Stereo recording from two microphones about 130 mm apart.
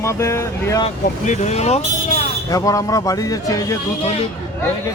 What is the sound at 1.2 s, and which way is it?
Speech, 65° left (ahead or behind).